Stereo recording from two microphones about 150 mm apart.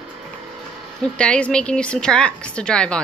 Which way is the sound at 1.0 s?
5° left (ahead or behind).